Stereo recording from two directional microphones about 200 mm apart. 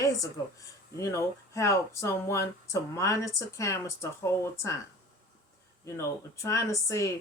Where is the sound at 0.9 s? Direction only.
15° left (ahead or behind).